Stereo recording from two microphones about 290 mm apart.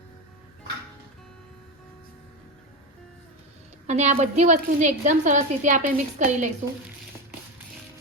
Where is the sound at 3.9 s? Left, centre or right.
Right.